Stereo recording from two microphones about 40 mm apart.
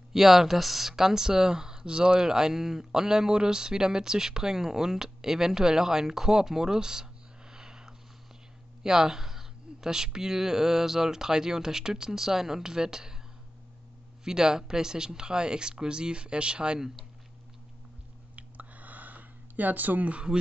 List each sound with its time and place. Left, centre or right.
0.1 s speech: centre
14.2 s speech: centre
18.3 s a sound: right